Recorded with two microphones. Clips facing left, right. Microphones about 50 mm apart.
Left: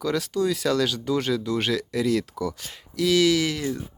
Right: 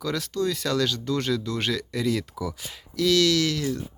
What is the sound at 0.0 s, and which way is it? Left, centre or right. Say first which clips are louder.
Speech: left 2 dB; centre.